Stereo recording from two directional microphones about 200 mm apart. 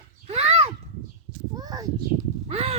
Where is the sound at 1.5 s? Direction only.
20° right (ahead or behind).